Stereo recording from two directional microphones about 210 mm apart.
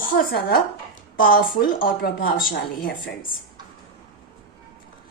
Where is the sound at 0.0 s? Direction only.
45° left (ahead or behind).